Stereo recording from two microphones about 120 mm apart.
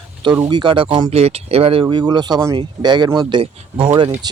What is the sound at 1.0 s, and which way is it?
Speech, 60° right (ahead or behind).